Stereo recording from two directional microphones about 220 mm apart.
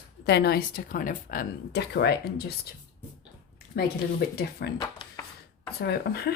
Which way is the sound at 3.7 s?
45° left (ahead or behind).